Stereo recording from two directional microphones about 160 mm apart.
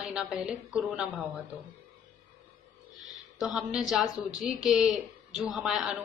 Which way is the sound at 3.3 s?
5° right (ahead or behind).